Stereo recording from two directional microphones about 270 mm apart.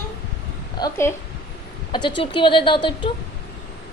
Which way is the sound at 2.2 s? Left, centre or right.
Centre.